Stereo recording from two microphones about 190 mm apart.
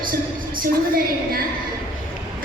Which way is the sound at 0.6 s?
50° right (ahead or behind).